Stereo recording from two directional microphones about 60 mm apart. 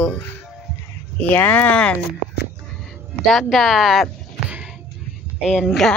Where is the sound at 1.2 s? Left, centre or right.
Left.